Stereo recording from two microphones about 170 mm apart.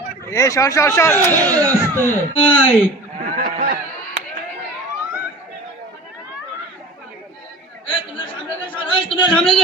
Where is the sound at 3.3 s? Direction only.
60° right (ahead or behind).